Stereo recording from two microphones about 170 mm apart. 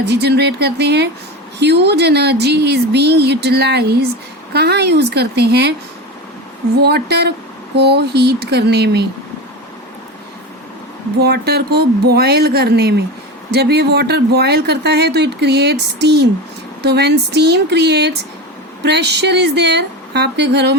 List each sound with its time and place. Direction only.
0.0 s speech: 80° right
6.8 s speech: 70° right (ahead or behind)
11.2 s a woman's voice: 70° right (ahead or behind)